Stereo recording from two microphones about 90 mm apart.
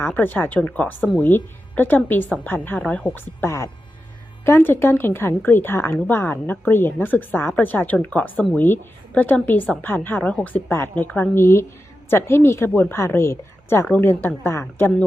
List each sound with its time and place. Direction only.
0.0 s speech: 20° left (ahead or behind)